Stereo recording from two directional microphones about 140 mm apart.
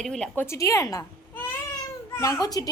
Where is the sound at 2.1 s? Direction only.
20° left (ahead or behind).